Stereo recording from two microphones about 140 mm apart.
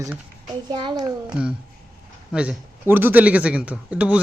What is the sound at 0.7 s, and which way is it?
Speech, 30° right (ahead or behind).